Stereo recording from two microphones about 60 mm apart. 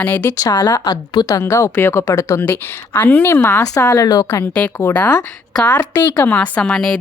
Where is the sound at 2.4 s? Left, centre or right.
Left.